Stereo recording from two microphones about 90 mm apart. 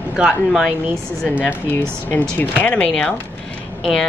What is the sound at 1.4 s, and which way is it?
Speech, 20° left (ahead or behind).